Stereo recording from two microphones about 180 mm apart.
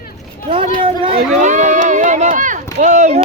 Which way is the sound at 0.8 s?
30° right (ahead or behind).